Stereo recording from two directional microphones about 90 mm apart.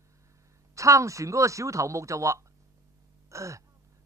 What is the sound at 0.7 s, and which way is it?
Speech, 35° right (ahead or behind).